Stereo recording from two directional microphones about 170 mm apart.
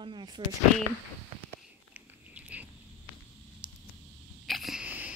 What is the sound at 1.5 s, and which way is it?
Biting, 10° right (ahead or behind).